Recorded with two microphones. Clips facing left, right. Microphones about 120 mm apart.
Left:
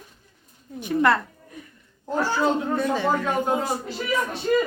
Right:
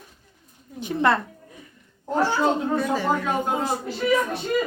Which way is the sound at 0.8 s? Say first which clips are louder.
Left 1 dB; 25° right (ahead or behind).